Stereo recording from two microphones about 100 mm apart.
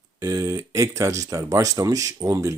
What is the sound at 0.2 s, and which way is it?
Speech, 35° right (ahead or behind).